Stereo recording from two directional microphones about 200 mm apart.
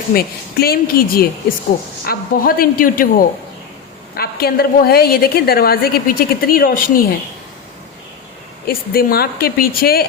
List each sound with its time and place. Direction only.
0.1 s a woman's voice: 50° left (ahead or behind)
8.6 s a woman's voice: 50° left (ahead or behind)